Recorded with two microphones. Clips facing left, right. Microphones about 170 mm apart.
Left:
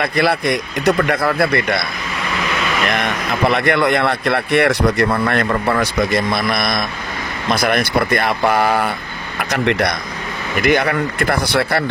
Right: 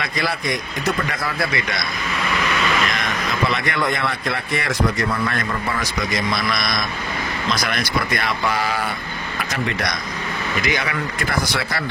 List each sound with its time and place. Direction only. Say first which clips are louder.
0.0 s speech: left 8 dB; 60° left (ahead or behind)
2.9 s speech: left 5 dB; 60° left (ahead or behind)